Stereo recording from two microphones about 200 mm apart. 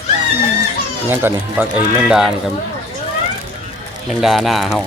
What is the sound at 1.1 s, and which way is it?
Speech, 10° right (ahead or behind).